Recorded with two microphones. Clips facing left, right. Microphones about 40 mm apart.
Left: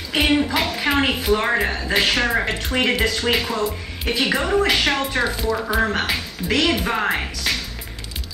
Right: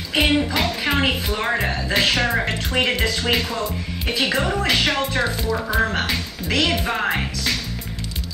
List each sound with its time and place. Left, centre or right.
0.1 s speech: centre